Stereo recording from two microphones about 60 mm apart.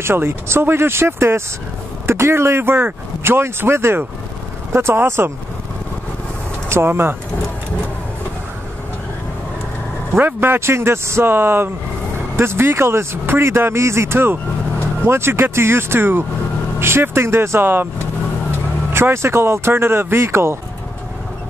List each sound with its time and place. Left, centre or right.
0.0 s a man's voice: right
6.7 s speech: right
10.1 s a man's voice: right
18.9 s a man's voice: right